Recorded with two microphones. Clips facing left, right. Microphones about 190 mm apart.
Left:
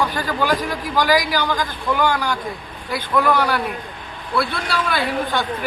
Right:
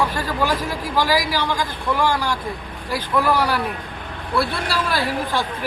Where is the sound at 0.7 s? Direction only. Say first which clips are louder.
Left 2 dB; 25° right (ahead or behind).